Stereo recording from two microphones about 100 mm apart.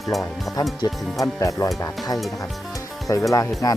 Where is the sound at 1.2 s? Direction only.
30° left (ahead or behind).